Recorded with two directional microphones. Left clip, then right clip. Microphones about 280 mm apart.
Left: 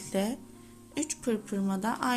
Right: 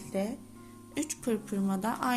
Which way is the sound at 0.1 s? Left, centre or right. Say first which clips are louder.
Left 2 dB; centre.